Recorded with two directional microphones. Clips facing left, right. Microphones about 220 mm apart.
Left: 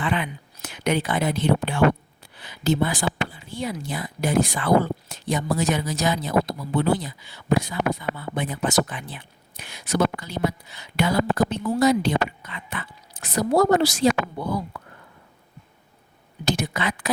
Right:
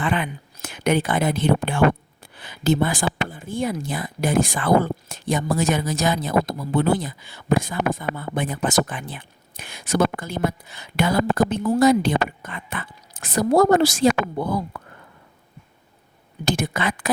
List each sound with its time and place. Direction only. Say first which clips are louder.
0.0 s speech: right 2 dB; 50° right (ahead or behind)
16.5 s speech: right 2 dB; 50° right (ahead or behind)